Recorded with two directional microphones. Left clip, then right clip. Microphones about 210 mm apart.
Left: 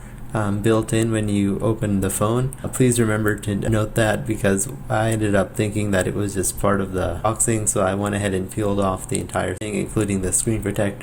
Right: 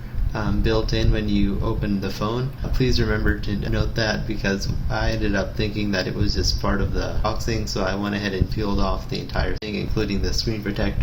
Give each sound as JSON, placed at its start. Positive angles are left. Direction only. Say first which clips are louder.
{"t": 0.3, "sound": "speech", "louder": "left 3 dB", "side_deg": 50}